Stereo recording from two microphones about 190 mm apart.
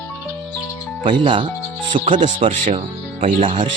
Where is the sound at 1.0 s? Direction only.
25° right (ahead or behind).